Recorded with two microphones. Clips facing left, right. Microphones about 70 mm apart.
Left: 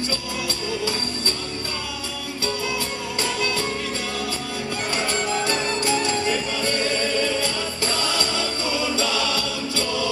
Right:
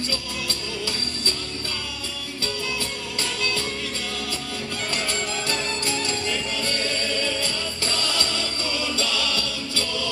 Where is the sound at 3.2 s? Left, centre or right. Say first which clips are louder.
Left 3 dB; left.